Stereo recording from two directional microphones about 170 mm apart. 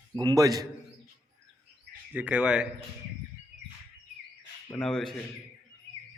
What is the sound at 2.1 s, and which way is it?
Speech, 5° right (ahead or behind).